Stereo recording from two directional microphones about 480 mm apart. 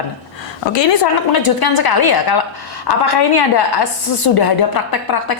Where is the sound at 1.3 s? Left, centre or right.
Left.